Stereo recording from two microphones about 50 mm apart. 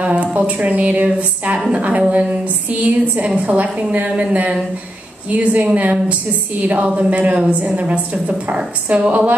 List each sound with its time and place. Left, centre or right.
0.0 s a woman's voice: right